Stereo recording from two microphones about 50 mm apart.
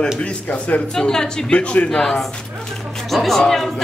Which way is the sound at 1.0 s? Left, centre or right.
Centre.